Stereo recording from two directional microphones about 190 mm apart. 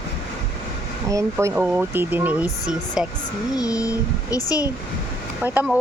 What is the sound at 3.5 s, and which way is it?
A child's voice, 20° left (ahead or behind).